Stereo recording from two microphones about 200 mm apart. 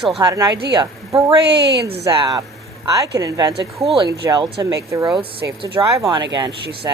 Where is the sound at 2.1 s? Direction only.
20° right (ahead or behind).